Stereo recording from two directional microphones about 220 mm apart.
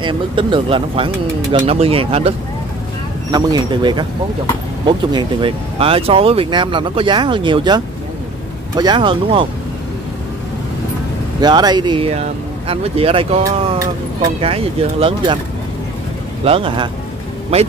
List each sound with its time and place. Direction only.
0.0 s speech: 20° right (ahead or behind)
11.4 s speech: 20° right (ahead or behind)
16.4 s speech: 25° right (ahead or behind)